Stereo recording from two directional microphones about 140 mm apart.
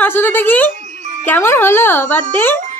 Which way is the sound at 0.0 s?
15° left (ahead or behind).